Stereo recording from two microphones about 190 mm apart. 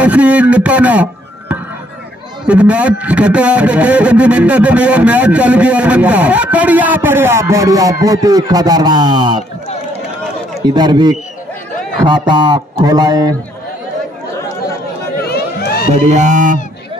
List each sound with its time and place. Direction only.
0.0 s speech: 5° right (ahead or behind)
2.4 s speech: 5° right (ahead or behind); by 9.4 s 25° right (ahead or behind)
10.6 s speech: 20° right (ahead or behind)
15.2 s run: 55° left (ahead or behind)
15.9 s speech: 40° right (ahead or behind)